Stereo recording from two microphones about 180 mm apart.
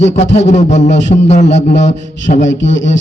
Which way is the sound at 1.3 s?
40° left (ahead or behind).